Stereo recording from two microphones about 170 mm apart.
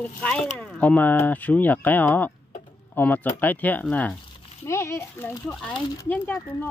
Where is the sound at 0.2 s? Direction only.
5° left (ahead or behind).